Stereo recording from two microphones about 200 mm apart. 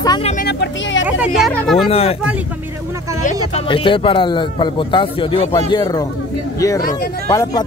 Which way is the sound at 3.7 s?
25° left (ahead or behind).